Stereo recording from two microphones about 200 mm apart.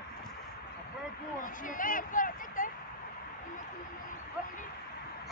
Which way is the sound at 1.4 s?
40° left (ahead or behind).